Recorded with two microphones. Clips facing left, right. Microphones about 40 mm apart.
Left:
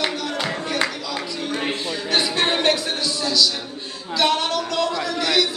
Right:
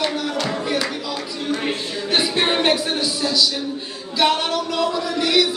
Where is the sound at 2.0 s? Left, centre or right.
Centre.